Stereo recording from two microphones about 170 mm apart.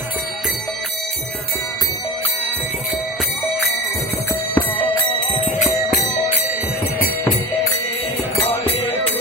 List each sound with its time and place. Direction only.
4.6 s music: 25° left (ahead or behind)